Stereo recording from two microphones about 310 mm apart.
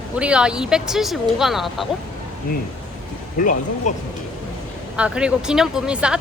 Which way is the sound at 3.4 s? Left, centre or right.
Left.